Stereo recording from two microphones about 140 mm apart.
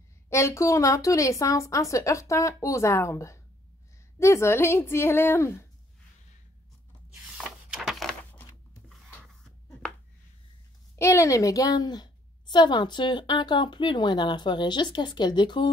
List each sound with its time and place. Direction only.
0.3 s a woman's voice: 20° left (ahead or behind)
7.2 s a sound: 5° right (ahead or behind)
11.0 s a woman's voice: 20° left (ahead or behind)